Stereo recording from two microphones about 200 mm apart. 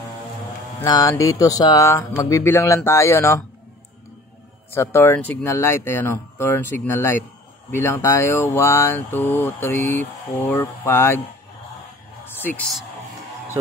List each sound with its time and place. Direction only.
0.7 s speech: 15° left (ahead or behind)
4.7 s speech: 10° left (ahead or behind)
12.4 s speech: 10° left (ahead or behind)